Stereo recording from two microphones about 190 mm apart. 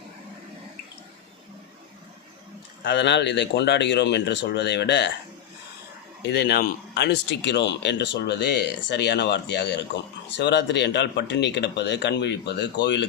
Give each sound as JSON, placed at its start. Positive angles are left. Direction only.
{"t": 2.8, "sound": "speech", "side_deg": 65}
{"t": 6.2, "sound": "speech", "side_deg": 60}